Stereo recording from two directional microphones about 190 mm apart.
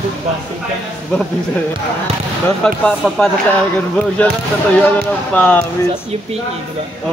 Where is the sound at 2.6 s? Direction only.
5° left (ahead or behind).